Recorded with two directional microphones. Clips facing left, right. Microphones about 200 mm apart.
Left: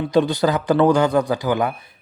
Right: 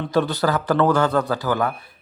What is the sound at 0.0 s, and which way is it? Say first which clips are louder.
A man's voice: left 3 dB; 15° left (ahead or behind).